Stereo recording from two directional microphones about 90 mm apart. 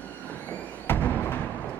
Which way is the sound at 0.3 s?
20° left (ahead or behind).